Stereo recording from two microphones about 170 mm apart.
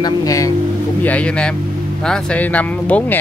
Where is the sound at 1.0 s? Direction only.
5° left (ahead or behind).